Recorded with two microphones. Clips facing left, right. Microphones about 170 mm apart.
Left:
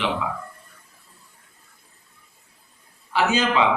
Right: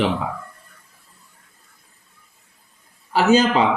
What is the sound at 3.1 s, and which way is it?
Speech, 40° right (ahead or behind).